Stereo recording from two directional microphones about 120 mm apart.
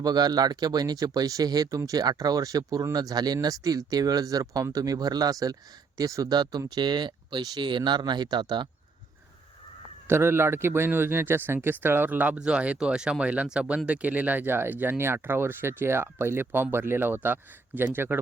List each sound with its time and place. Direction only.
0.0 s speech: 35° right (ahead or behind)
10.1 s speech: 20° right (ahead or behind)